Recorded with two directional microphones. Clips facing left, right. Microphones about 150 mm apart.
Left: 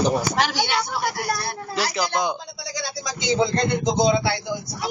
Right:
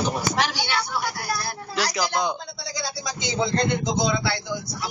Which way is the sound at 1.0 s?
45° left (ahead or behind).